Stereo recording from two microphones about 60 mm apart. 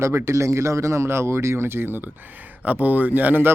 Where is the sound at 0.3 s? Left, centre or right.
Right.